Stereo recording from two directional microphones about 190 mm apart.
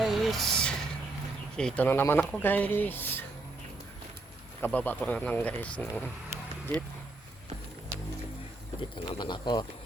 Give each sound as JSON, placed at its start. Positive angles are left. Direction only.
{"t": 0.0, "sound": "a sound", "side_deg": 0}
{"t": 1.5, "sound": "speech", "side_deg": 5}
{"t": 4.6, "sound": "speech", "side_deg": 10}
{"t": 8.8, "sound": "speech", "side_deg": 25}